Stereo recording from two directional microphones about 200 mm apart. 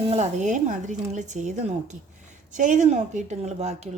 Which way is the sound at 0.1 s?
35° right (ahead or behind).